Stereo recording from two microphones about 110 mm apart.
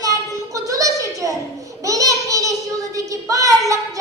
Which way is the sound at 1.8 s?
30° right (ahead or behind).